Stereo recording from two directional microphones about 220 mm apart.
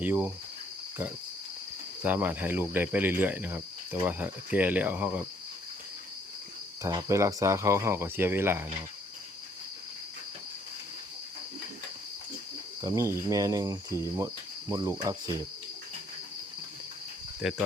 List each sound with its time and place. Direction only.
0.0 s cricket: 10° right (ahead or behind)
2.0 s cricket: 10° right (ahead or behind)
6.8 s cricket: 15° right (ahead or behind)
12.8 s cricket: 15° right (ahead or behind)
17.4 s cricket: centre (ahead or behind)